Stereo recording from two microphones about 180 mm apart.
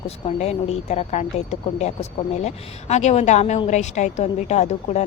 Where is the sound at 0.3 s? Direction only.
35° left (ahead or behind).